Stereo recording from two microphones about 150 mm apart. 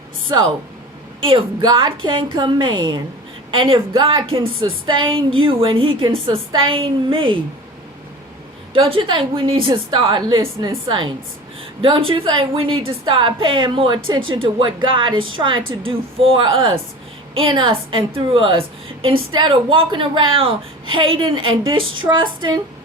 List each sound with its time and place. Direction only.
0.3 s speech: 25° right (ahead or behind)
1.2 s a woman's voice: 35° right (ahead or behind)
8.7 s a woman's voice: 35° right (ahead or behind)